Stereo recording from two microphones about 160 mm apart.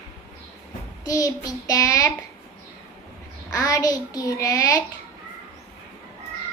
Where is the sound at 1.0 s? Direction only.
20° left (ahead or behind).